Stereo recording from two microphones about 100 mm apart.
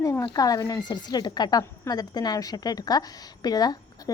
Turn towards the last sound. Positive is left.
turn(degrees=40)  # may be behind; listen again after turning